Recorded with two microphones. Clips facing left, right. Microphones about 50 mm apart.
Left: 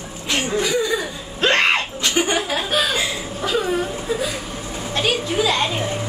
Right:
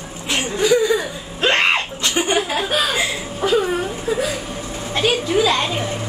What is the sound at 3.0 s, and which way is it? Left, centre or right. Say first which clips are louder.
Chuckle: right 2 dB; centre.